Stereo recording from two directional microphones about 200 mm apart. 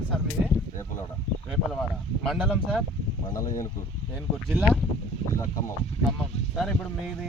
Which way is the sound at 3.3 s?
15° left (ahead or behind).